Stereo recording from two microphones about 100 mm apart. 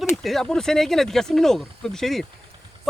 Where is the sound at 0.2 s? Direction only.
5° left (ahead or behind).